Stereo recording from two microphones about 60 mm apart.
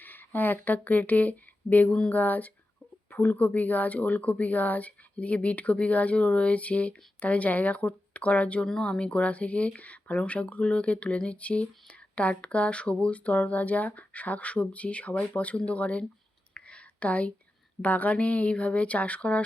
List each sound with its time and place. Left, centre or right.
0.0 s speech: left
16.6 s a sound: centre
17.8 s speech: left